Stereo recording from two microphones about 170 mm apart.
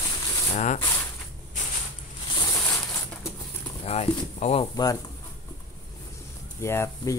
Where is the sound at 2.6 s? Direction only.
15° left (ahead or behind).